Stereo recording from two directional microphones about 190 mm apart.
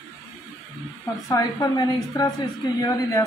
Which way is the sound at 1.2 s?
15° left (ahead or behind).